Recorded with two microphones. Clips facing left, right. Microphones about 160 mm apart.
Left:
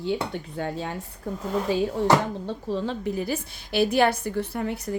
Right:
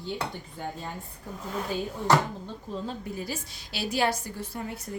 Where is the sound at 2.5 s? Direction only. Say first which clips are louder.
Left 7 dB; 75° left (ahead or behind).